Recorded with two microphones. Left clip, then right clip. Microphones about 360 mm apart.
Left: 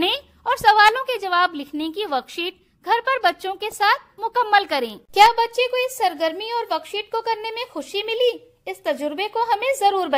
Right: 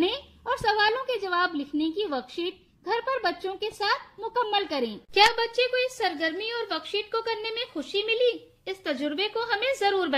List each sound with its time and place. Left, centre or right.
0.0 s a sound: left
1.8 s a woman's voice: left
2.0 s a woman's voice: left